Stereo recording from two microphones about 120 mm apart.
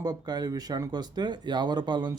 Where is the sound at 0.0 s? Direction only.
35° right (ahead or behind).